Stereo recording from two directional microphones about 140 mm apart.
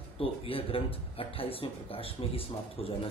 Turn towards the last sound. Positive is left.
turn(degrees=40)  # may be behind; listen again after turning